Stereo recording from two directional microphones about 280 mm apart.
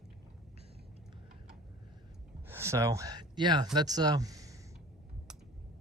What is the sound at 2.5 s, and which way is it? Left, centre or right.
Speech, centre.